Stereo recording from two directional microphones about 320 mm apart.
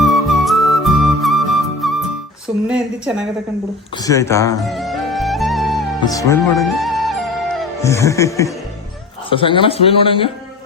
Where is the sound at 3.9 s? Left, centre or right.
Centre.